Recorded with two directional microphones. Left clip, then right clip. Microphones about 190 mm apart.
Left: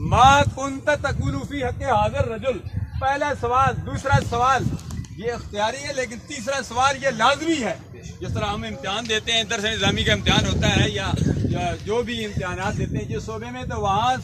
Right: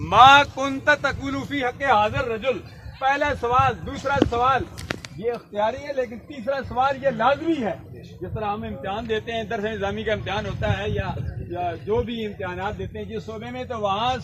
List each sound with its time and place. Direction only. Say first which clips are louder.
0.1 s a man's voice: right 2 dB; 30° right (ahead or behind)
13.3 s a man's voice: even; 50° right (ahead or behind)